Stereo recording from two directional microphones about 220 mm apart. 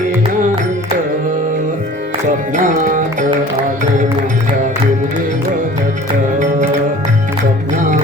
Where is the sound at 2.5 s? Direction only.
35° right (ahead or behind).